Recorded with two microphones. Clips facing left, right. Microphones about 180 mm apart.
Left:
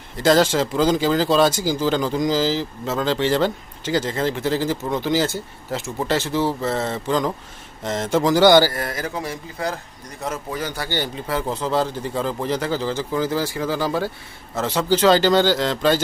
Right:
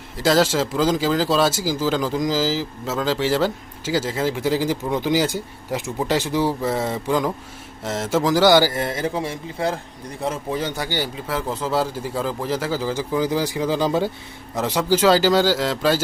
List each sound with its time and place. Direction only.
0.2 s speech: centre (ahead or behind)
8.6 s a man's voice: 25° right (ahead or behind)
10.8 s speech: 10° right (ahead or behind)